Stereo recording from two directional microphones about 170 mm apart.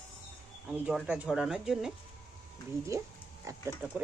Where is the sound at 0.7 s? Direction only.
5° right (ahead or behind).